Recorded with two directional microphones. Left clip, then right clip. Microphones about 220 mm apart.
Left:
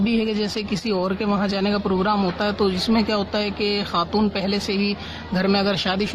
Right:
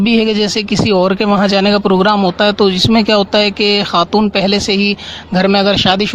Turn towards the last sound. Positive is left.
turn(degrees=-40)  # may be behind; listen again after turning